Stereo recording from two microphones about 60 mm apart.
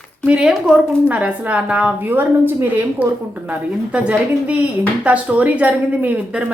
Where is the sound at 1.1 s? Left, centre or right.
Right.